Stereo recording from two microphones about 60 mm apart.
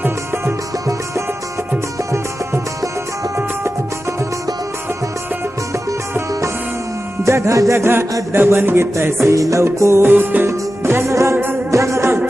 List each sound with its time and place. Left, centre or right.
5.7 s music: right
9.3 s music: right
9.7 s music: right